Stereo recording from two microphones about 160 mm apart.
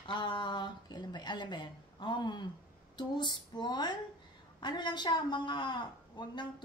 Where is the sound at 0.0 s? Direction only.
30° left (ahead or behind).